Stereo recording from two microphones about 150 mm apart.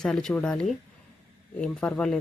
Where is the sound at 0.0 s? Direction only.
5° left (ahead or behind).